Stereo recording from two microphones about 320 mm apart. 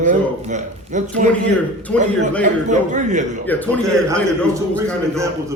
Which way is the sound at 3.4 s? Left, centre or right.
Centre.